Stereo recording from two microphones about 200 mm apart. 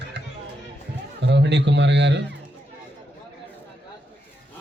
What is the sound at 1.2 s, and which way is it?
A man's voice, 60° right (ahead or behind).